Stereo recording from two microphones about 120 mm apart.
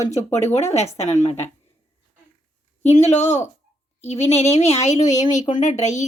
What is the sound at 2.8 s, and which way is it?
Speech, 65° left (ahead or behind).